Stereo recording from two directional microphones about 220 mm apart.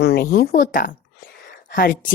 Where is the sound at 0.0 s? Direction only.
45° left (ahead or behind).